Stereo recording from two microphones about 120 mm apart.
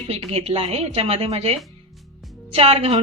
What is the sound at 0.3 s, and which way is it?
A woman's voice, 55° right (ahead or behind).